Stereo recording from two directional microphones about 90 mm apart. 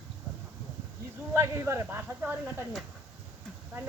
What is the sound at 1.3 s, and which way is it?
Speech, 30° right (ahead or behind).